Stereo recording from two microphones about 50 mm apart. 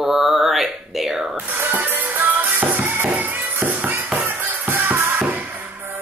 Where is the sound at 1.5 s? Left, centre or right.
Right.